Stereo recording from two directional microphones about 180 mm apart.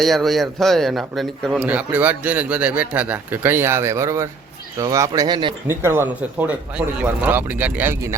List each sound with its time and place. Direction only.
0.0 s a man's voice: centre (ahead or behind); by 5.5 s 25° right (ahead or behind)
5.6 s a man's voice: 15° right (ahead or behind)